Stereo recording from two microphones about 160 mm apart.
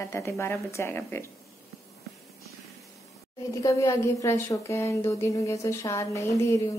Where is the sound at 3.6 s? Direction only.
20° left (ahead or behind).